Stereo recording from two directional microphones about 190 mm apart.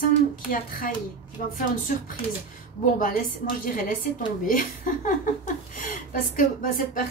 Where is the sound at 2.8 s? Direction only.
45° left (ahead or behind).